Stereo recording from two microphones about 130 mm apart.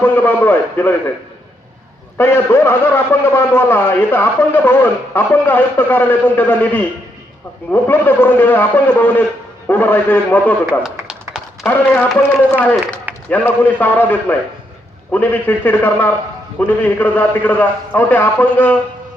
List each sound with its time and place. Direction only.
0.0 s a man's voice: 15° left (ahead or behind)
2.1 s a man's voice: 20° left (ahead or behind)
10.8 s a sound: 5° right (ahead or behind)
11.6 s a man's voice: 10° left (ahead or behind)